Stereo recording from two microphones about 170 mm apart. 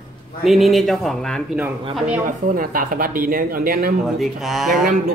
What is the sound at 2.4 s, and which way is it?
Speech, 55° right (ahead or behind).